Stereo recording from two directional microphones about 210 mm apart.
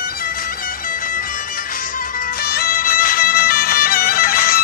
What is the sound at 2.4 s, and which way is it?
Music, 45° left (ahead or behind).